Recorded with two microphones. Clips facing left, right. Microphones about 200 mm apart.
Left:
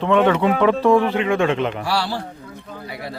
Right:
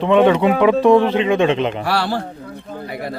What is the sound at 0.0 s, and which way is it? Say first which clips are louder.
Speech: right 3 dB; 15° right (ahead or behind).